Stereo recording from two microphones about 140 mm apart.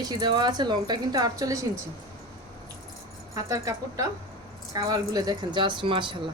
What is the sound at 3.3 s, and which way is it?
Speech, 25° right (ahead or behind).